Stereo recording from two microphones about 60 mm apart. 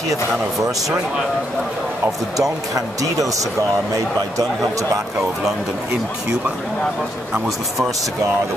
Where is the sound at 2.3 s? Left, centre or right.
Right.